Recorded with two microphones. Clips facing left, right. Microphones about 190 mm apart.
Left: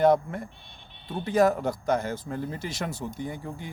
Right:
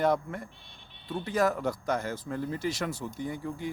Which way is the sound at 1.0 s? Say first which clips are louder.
Left 5 dB; 25° left (ahead or behind).